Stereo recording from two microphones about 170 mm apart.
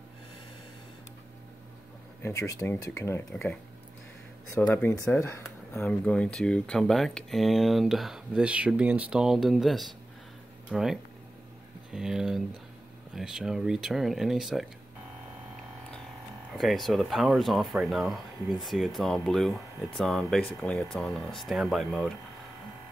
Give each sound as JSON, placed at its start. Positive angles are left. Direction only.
{"t": 2.2, "sound": "speech", "side_deg": 15}
{"t": 4.6, "sound": "speech", "side_deg": 10}
{"t": 5.2, "sound": "a sound", "side_deg": 15}
{"t": 5.8, "sound": "speech", "side_deg": 5}
{"t": 16.5, "sound": "speech", "side_deg": 0}